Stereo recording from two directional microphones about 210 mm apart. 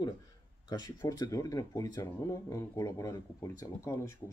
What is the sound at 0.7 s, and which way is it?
Speech, 15° left (ahead or behind).